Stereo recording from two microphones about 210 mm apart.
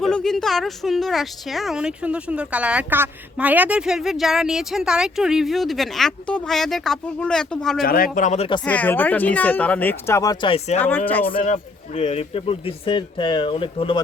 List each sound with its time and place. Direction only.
0.0 s a woman's voice: 5° left (ahead or behind)
7.8 s speech: 45° left (ahead or behind); by 8.6 s 25° left (ahead or behind)
8.6 s speech: 5° left (ahead or behind); by 10.8 s 25° left (ahead or behind)
10.8 s speech: 10° left (ahead or behind)
11.3 s a man's voice: 30° left (ahead or behind)